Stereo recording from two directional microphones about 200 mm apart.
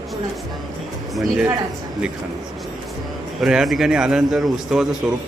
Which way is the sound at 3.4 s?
5° right (ahead or behind).